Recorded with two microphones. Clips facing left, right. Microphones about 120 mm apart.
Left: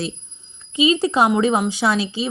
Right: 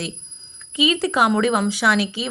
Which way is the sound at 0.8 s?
25° left (ahead or behind).